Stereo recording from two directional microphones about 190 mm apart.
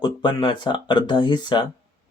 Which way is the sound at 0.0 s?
25° left (ahead or behind).